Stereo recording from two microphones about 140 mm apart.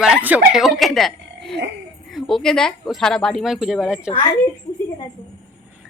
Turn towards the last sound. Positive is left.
turn(degrees=45)  # may be behind; listen again after turning